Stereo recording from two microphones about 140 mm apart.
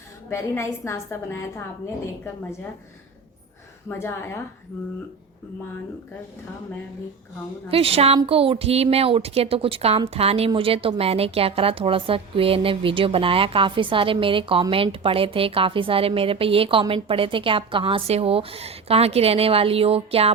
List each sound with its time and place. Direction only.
0.3 s a woman's voice: 20° left (ahead or behind)
3.8 s a woman's voice: 20° left (ahead or behind)
7.7 s speech: 45° right (ahead or behind)